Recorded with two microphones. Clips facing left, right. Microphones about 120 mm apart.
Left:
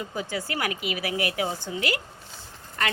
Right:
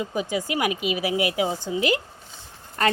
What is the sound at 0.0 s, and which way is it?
A woman's voice, 15° right (ahead or behind).